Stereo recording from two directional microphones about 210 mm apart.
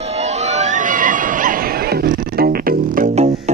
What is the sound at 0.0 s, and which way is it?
Music, 30° right (ahead or behind).